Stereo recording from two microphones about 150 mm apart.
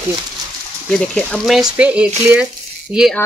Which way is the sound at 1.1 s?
Centre (ahead or behind).